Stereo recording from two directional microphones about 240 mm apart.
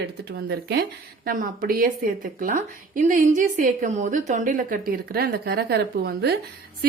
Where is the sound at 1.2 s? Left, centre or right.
Right.